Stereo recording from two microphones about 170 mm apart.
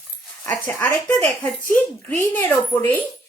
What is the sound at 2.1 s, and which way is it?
Speech, 10° left (ahead or behind).